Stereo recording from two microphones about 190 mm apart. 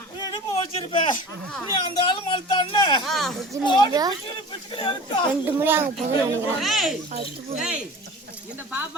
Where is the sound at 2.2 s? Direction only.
25° left (ahead or behind).